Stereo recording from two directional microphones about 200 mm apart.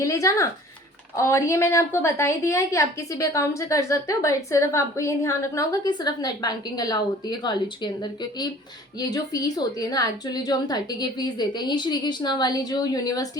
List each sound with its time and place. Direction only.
0.0 s a woman's voice: 15° left (ahead or behind)